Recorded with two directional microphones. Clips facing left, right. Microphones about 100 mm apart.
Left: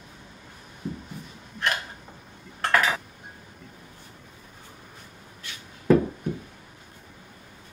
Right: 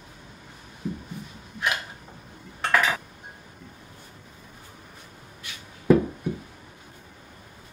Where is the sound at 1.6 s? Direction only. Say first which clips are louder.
Even; 5° right (ahead or behind).